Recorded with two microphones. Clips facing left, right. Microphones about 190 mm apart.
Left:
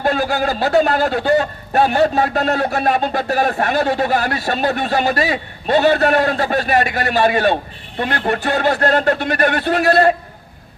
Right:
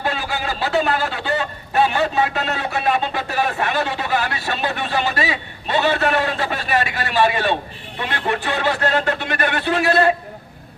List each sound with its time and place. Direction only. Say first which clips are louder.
0.0 s a man's voice: left 7 dB; 40° left (ahead or behind)